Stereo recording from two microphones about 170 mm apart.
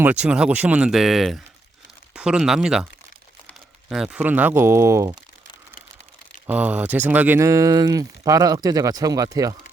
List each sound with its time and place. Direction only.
0.0 s speech: 10° right (ahead or behind)
3.8 s speech: 5° right (ahead or behind)
6.5 s speech: 10° right (ahead or behind)